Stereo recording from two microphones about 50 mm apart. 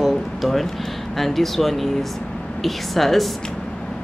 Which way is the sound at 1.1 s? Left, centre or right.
Centre.